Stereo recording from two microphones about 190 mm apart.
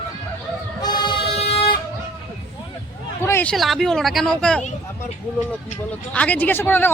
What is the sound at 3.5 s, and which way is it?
Speech, centre (ahead or behind).